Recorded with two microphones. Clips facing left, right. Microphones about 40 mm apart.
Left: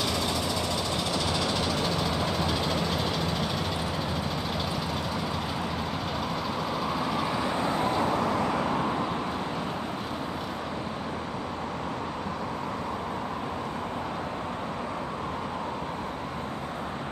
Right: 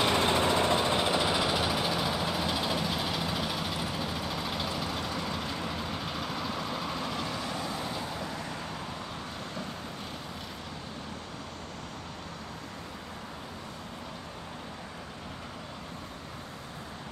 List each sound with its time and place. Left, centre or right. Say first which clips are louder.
0.0 s vehicle: right 3 dB; right; by 8.0 s left
8.0 s vehicle: left 11 dB; left